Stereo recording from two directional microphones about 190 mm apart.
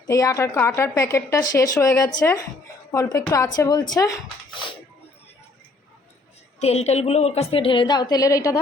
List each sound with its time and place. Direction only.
0.1 s speech: 15° left (ahead or behind)
6.6 s a woman's voice: 35° left (ahead or behind); by 8.5 s 15° left (ahead or behind)